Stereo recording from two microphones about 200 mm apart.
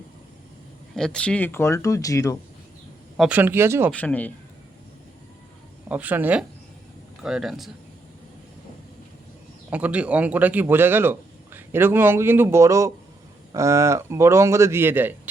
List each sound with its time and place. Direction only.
0.9 s speech: 5° left (ahead or behind)
3.2 s speech: 5° right (ahead or behind)
3.9 s speech: 10° left (ahead or behind)
5.9 s speech: 10° right (ahead or behind)
9.6 s speech: 5° right (ahead or behind)